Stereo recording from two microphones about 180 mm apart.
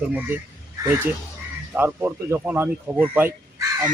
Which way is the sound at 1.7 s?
10° right (ahead or behind).